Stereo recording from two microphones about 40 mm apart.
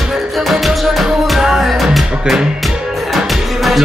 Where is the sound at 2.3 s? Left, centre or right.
Right.